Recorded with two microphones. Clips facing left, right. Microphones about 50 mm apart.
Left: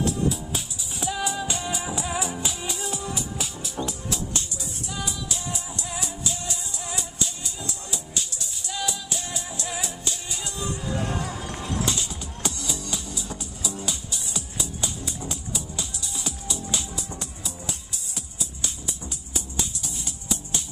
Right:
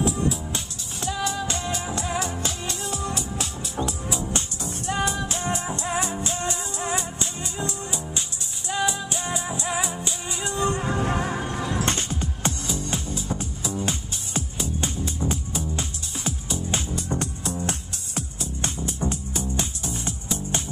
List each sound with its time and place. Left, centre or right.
0.0 s music: centre
4.3 s music: right
11.8 s music: right